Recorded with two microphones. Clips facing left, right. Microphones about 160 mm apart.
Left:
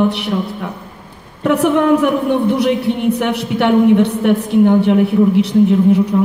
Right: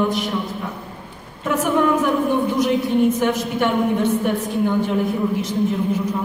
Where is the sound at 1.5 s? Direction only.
70° left (ahead or behind).